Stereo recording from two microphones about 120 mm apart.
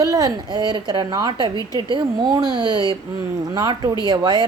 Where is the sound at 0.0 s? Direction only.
30° right (ahead or behind).